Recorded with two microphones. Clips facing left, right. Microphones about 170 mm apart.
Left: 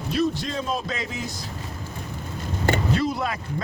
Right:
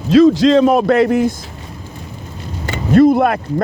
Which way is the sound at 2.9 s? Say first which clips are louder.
Right 15 dB; 50° right (ahead or behind).